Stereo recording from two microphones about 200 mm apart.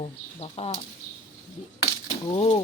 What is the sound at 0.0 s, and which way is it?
Speech, 30° left (ahead or behind).